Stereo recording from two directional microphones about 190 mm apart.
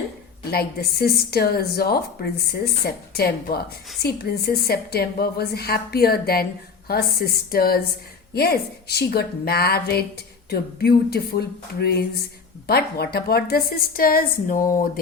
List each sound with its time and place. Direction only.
0.5 s a woman's voice: 55° left (ahead or behind)